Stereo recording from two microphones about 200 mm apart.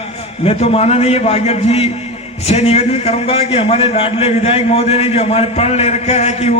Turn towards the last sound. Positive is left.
turn(degrees=35)  # may be behind; listen again after turning